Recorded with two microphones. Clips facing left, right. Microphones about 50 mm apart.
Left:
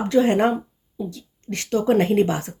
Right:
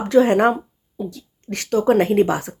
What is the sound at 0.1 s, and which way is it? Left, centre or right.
A woman's voice, right.